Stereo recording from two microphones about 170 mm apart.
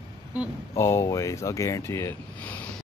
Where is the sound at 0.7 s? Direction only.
15° left (ahead or behind).